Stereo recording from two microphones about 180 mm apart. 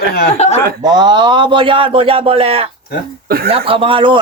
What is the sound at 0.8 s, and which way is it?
Speech, 25° right (ahead or behind).